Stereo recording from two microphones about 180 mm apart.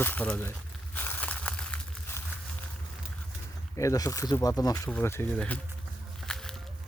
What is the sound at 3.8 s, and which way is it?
A man's voice, 15° left (ahead or behind).